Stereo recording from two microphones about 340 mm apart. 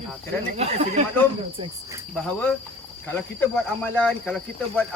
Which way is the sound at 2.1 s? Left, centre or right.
Centre.